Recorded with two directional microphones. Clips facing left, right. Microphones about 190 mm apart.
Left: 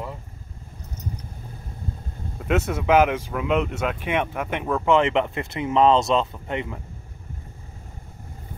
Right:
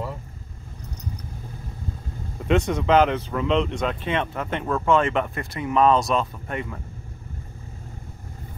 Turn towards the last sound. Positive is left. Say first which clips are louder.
# left 2 dB
turn(degrees=20)  # may be behind; listen again after turning